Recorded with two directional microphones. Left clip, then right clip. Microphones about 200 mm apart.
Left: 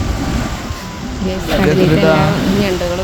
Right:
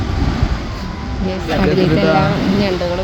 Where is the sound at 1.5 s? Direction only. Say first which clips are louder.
Left 2 dB; 35° left (ahead or behind).